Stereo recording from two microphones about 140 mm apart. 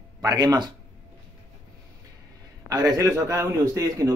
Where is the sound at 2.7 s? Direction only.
25° right (ahead or behind).